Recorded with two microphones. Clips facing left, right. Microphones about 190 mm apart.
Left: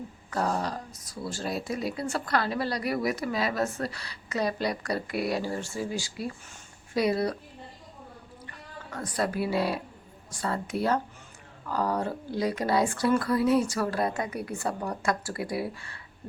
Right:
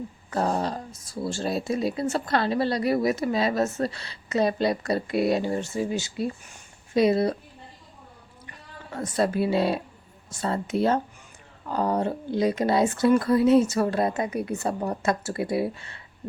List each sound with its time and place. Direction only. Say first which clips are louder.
0.3 s speech: right 3 dB; 25° right (ahead or behind)
8.4 s speech: right 2 dB; 25° right (ahead or behind)